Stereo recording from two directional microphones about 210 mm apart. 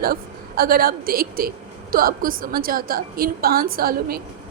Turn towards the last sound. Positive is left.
turn(degrees=-45)  # may be behind; listen again after turning